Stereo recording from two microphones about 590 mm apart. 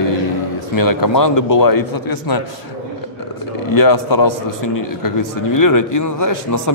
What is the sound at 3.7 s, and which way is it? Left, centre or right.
A man's voice, left.